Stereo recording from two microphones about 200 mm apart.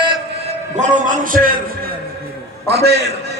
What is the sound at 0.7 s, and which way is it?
Speech, 40° right (ahead or behind).